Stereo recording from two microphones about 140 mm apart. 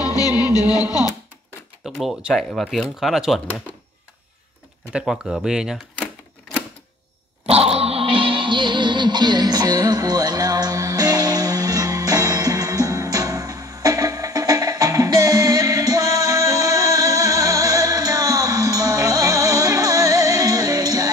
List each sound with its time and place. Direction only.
0.0 s music: 25° left (ahead or behind)
2.0 s speech: centre (ahead or behind)
4.9 s speech: 5° right (ahead or behind)
7.4 s music: 45° right (ahead or behind); by 21.1 s 25° right (ahead or behind)